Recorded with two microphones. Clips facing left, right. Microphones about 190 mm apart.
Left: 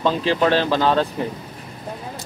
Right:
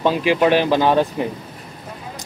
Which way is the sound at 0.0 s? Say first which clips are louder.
Right 2 dB; 15° right (ahead or behind).